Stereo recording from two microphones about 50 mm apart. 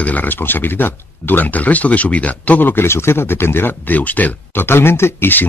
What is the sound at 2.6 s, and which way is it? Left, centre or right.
Speech, left.